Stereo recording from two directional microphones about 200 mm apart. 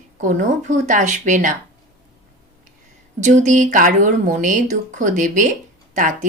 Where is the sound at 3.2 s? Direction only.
40° right (ahead or behind).